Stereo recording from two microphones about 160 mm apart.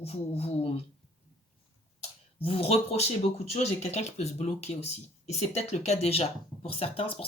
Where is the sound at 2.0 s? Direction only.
35° left (ahead or behind).